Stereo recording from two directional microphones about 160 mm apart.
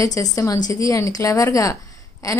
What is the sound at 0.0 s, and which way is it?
A woman's voice, 20° left (ahead or behind).